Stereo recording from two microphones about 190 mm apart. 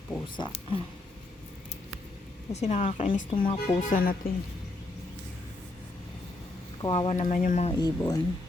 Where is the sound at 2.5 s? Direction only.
35° left (ahead or behind).